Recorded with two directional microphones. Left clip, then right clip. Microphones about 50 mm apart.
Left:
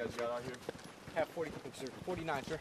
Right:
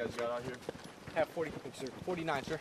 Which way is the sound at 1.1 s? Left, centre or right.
Right.